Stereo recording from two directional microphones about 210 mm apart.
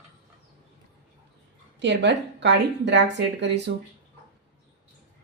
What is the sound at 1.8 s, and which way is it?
A woman's voice, 55° right (ahead or behind).